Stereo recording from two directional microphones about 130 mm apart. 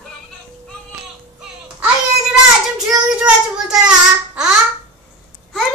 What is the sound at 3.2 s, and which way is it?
Child singing, 5° right (ahead or behind).